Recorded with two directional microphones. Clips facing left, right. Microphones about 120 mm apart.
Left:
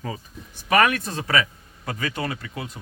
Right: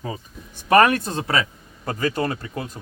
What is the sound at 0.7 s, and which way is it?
Speech, 35° right (ahead or behind).